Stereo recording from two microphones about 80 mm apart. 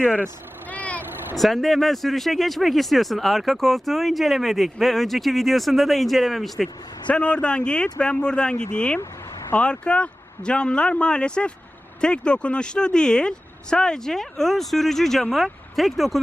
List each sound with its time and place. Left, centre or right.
0.7 s vehicle: centre
1.4 s speech: centre
7.1 s speech: centre